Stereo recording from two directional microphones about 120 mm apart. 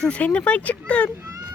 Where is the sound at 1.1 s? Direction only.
20° right (ahead or behind).